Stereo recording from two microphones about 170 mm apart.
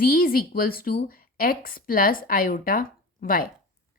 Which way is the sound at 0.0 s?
60° left (ahead or behind).